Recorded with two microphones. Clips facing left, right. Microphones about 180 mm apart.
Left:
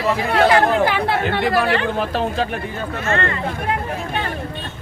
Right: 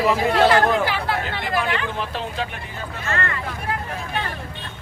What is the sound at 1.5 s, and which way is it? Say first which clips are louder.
Speech: left 6 dB; 40° left (ahead or behind).